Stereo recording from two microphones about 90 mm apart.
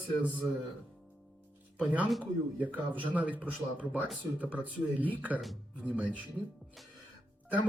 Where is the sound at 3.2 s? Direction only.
15° right (ahead or behind).